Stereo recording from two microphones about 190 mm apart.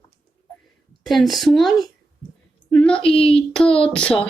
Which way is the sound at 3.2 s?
5° left (ahead or behind).